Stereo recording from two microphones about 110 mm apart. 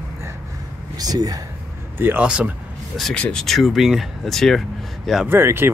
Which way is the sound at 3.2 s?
10° left (ahead or behind).